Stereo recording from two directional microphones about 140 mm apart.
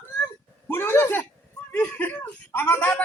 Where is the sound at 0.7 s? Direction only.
15° left (ahead or behind).